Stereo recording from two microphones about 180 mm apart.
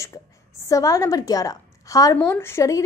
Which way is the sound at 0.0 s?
20° left (ahead or behind).